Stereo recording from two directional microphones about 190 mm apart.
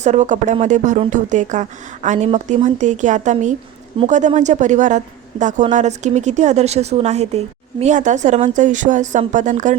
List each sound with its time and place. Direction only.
0.0 s a woman's voice: 40° right (ahead or behind)